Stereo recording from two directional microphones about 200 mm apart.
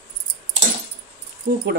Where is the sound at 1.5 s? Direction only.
55° right (ahead or behind).